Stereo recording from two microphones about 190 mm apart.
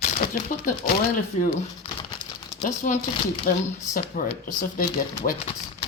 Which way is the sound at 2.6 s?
40° left (ahead or behind).